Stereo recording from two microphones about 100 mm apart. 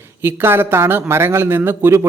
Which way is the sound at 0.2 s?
20° right (ahead or behind).